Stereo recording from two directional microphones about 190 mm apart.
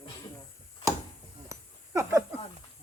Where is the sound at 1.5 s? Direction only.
15° right (ahead or behind).